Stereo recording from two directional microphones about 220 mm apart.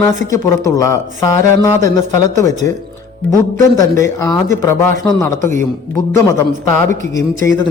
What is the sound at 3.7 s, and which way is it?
A man's voice, 15° left (ahead or behind).